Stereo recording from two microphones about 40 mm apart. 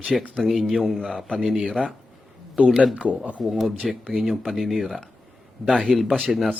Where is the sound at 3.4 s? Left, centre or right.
Centre.